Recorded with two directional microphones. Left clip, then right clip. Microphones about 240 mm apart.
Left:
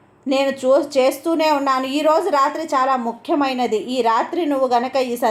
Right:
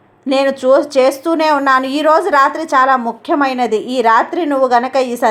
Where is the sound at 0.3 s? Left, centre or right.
Centre.